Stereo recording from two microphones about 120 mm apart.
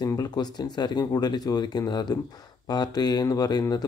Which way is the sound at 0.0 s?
30° left (ahead or behind).